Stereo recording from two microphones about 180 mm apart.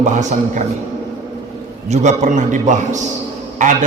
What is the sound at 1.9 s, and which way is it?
A man's voice, 40° right (ahead or behind).